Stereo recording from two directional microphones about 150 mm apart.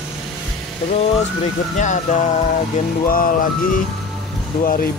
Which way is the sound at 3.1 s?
70° left (ahead or behind).